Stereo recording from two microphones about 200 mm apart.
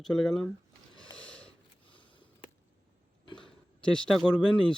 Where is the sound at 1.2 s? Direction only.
5° left (ahead or behind).